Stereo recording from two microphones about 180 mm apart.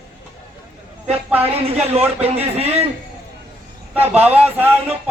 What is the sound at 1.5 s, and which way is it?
Speech, 35° right (ahead or behind).